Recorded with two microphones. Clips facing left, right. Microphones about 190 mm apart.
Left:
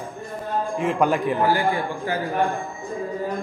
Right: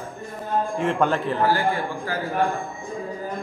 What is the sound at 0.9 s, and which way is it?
A man's voice, 15° left (ahead or behind).